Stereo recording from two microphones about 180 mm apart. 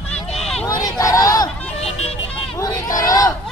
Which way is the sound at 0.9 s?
20° left (ahead or behind).